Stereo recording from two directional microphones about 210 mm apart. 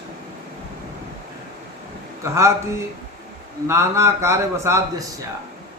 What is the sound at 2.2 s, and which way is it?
Speech, 15° right (ahead or behind).